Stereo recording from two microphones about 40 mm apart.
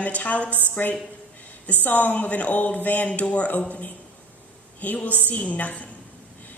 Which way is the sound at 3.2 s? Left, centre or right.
Left.